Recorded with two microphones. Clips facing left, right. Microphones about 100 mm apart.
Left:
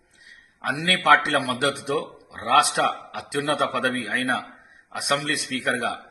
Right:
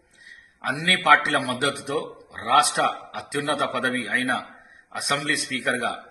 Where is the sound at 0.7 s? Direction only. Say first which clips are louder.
Even; 50° left (ahead or behind).